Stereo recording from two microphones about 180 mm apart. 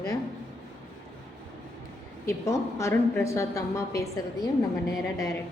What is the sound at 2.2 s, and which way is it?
A woman's voice, 15° left (ahead or behind).